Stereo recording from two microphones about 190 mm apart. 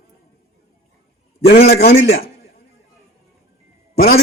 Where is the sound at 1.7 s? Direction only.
55° left (ahead or behind).